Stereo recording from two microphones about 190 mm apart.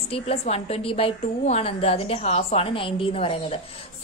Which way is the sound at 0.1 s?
30° left (ahead or behind).